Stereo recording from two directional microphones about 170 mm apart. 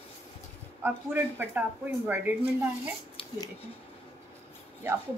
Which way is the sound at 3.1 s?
25° left (ahead or behind).